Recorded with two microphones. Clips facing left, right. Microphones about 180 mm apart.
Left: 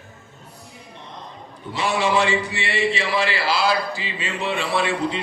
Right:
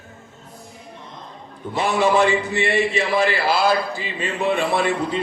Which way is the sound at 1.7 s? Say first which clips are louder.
Right 3 dB; 50° right (ahead or behind).